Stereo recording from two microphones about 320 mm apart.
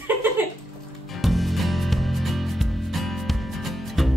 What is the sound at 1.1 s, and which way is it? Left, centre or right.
Music, centre.